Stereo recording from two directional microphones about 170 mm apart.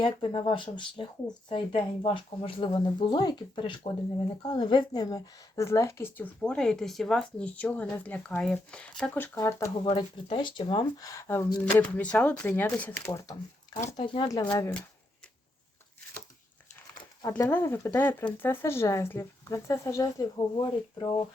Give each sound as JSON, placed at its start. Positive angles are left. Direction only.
{"t": 0.0, "sound": "speech", "side_deg": 30}
{"t": 9.9, "sound": "speech", "side_deg": 30}
{"t": 14.6, "sound": "speech", "side_deg": 5}
{"t": 17.2, "sound": "speech", "side_deg": 15}